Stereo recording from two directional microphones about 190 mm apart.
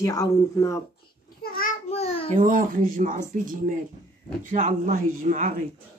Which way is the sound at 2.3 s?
45° right (ahead or behind).